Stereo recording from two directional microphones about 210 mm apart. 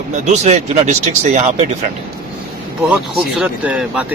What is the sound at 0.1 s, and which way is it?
Speech, 35° right (ahead or behind).